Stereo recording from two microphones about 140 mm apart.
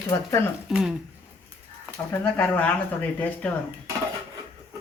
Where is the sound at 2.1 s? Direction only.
10° left (ahead or behind).